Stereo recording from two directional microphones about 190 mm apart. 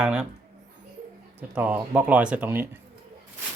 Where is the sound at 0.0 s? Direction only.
10° right (ahead or behind).